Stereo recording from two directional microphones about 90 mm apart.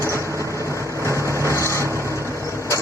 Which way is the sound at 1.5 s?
35° left (ahead or behind).